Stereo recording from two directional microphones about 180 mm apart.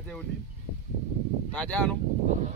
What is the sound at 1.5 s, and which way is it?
Speech, 10° left (ahead or behind).